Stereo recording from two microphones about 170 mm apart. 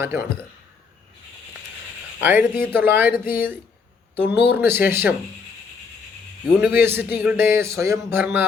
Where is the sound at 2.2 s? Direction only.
10° right (ahead or behind).